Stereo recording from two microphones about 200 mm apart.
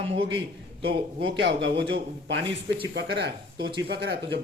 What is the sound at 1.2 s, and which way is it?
A man's voice, 65° right (ahead or behind).